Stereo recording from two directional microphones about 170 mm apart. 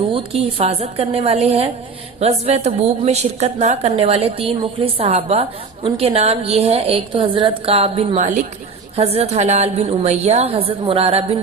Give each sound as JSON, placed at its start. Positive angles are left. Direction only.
{"t": 0.1, "sound": "a woman's voice", "side_deg": -35}
{"t": 8.2, "sound": "a woman's voice", "side_deg": -50}
{"t": 9.0, "sound": "a woman's voice", "side_deg": -40}